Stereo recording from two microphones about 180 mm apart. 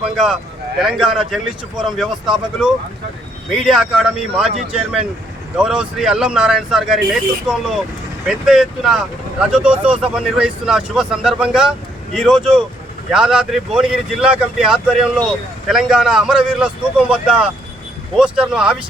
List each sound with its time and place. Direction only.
0.8 s speech: centre (ahead or behind)